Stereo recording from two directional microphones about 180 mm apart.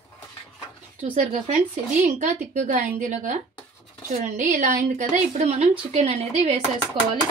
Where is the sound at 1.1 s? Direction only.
35° right (ahead or behind).